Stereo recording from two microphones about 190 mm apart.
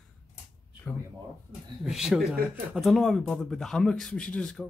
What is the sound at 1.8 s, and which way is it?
Speech, centre (ahead or behind).